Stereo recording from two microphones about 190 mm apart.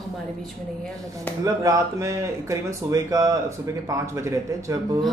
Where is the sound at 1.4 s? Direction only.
15° right (ahead or behind).